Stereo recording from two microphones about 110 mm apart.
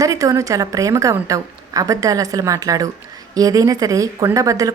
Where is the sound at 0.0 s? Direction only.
35° right (ahead or behind).